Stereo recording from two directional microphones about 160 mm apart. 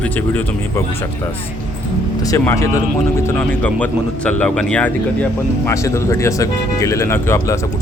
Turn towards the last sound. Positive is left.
turn(degrees=20)  # may be behind; listen again after turning